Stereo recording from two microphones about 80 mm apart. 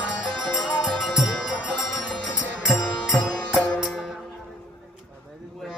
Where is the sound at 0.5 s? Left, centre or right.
Centre.